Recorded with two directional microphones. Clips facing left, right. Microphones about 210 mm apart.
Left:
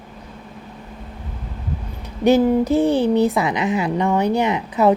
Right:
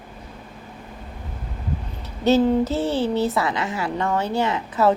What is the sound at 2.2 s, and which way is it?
A woman's voice, 15° left (ahead or behind).